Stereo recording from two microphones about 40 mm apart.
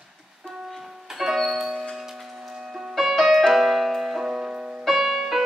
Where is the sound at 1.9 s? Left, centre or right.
Centre.